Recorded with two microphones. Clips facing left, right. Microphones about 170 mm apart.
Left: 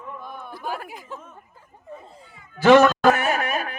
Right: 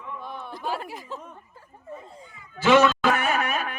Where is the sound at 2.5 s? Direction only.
50° left (ahead or behind).